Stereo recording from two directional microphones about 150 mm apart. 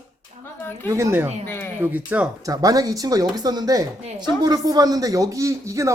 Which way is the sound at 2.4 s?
25° right (ahead or behind).